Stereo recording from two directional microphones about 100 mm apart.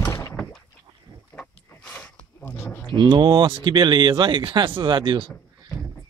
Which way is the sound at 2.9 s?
50° right (ahead or behind).